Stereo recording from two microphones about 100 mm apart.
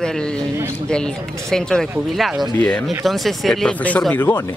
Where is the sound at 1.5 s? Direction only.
5° left (ahead or behind).